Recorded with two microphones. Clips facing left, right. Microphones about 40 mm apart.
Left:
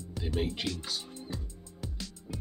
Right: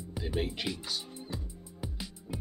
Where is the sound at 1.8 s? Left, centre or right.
Centre.